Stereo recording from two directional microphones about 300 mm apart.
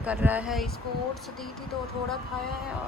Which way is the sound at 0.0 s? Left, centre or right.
Centre.